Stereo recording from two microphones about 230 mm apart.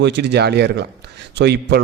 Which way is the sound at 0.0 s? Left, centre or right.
Right.